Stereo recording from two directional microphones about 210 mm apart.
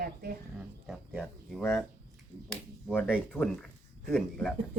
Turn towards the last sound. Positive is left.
turn(degrees=5)  # may be behind; listen again after turning